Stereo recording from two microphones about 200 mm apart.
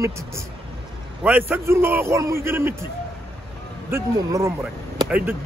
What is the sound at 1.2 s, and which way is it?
Speech, 10° right (ahead or behind).